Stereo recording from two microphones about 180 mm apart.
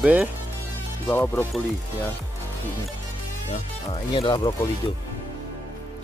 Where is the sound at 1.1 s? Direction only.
10° left (ahead or behind).